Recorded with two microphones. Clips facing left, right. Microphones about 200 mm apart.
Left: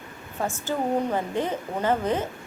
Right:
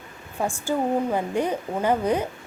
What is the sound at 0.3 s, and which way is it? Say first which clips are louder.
A woman's voice: right 3 dB; 10° right (ahead or behind).